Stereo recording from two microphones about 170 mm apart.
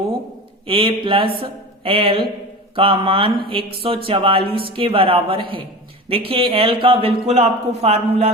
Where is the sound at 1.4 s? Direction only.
35° right (ahead or behind).